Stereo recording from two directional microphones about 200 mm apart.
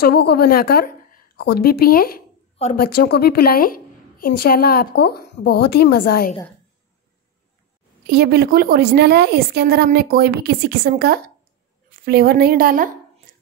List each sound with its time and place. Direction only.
0.0 s a woman's voice: 50° left (ahead or behind)
8.1 s a woman's voice: 50° right (ahead or behind)